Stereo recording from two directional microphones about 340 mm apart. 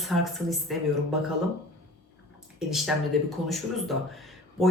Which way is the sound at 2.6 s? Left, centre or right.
Centre.